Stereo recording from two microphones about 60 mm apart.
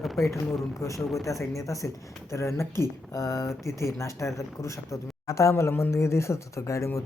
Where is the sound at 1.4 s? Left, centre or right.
Left.